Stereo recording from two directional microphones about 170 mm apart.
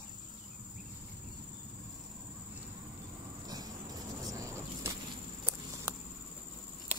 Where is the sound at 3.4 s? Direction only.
20° right (ahead or behind).